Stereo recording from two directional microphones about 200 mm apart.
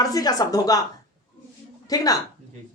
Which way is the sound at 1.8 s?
20° left (ahead or behind).